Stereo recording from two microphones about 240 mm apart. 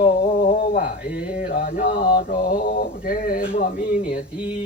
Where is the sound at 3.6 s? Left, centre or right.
Left.